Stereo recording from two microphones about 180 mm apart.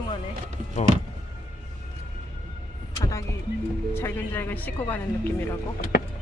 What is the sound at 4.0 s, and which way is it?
Speech, 10° left (ahead or behind).